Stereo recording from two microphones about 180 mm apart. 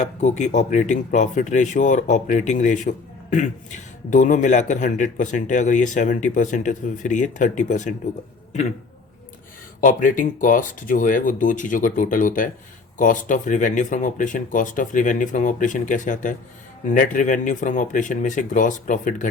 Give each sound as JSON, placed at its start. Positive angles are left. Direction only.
{"t": 0.0, "sound": "speech", "side_deg": 40}
{"t": 9.8, "sound": "speech", "side_deg": 45}